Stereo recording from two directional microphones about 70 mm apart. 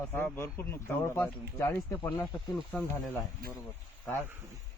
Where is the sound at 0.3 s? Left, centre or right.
Left.